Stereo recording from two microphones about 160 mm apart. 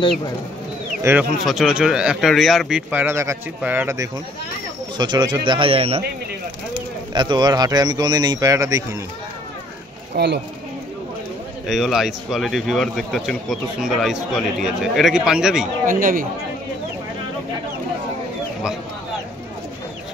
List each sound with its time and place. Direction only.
1.1 s a man's voice: 15° right (ahead or behind)
1.4 s a man's voice: centre (ahead or behind)
2.9 s a man's voice: 15° right (ahead or behind)
4.9 s a man's voice: 25° right (ahead or behind)
7.2 s a man's voice: 25° right (ahead or behind)
10.1 s speech: 90° right
11.6 s a man's voice: centre (ahead or behind)
15.8 s speech: 60° right (ahead or behind)